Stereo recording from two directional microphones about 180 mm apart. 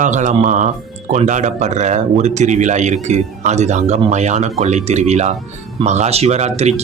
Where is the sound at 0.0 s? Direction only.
40° right (ahead or behind).